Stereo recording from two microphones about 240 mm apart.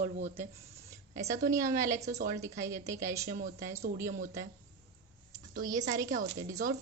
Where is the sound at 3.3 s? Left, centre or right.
Right.